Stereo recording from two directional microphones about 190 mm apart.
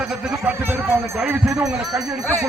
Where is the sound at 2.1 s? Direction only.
15° right (ahead or behind).